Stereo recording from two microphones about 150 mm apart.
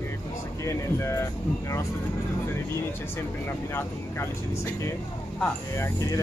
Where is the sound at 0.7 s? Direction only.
20° left (ahead or behind).